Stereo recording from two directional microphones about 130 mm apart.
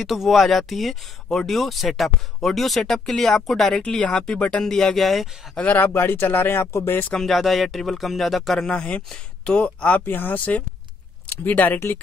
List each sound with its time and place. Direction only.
0.0 s speech: centre (ahead or behind)
5.6 s speech: 15° left (ahead or behind)
7.2 s speech: centre (ahead or behind)